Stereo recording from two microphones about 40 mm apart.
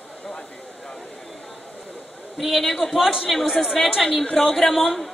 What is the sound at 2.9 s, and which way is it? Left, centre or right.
Speech, centre.